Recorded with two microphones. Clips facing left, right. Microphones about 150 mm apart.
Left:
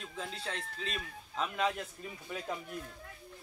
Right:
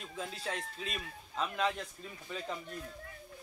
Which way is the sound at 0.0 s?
5° right (ahead or behind).